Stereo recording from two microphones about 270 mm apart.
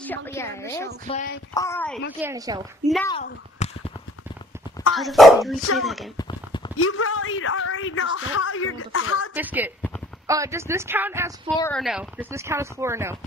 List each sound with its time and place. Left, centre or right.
0.0 s a woman's voice: centre
1.0 s speech: left
1.5 s a woman's voice: centre
2.1 s speech: centre
3.1 s speech: left
4.9 s speech: centre
6.1 s clip-clop: centre
6.8 s a woman's voice: left
9.3 s speech: centre